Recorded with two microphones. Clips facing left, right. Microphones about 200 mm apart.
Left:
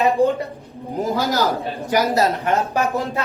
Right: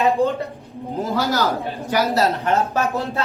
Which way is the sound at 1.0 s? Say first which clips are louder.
Left 1 dB; 15° left (ahead or behind).